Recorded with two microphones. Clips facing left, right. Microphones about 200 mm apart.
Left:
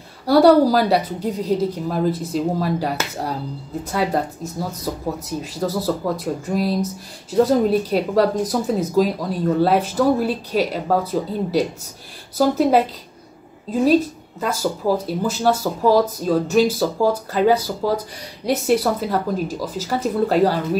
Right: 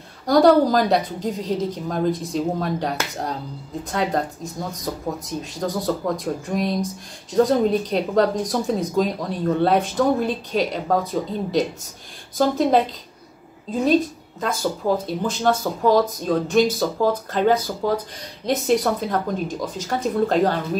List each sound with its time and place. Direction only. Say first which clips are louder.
0.3 s speech: left 2 dB; 10° left (ahead or behind)